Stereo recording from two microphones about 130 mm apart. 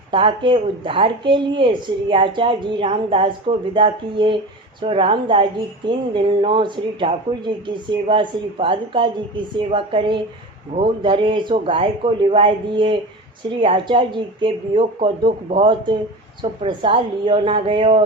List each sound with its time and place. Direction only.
0.1 s speech: 40° right (ahead or behind)